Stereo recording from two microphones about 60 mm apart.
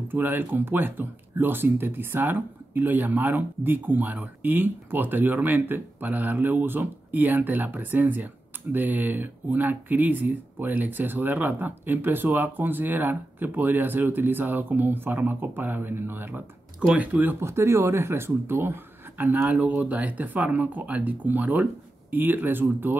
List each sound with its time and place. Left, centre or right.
0.1 s speech: right
16.8 s speech: right
17.4 s speech: right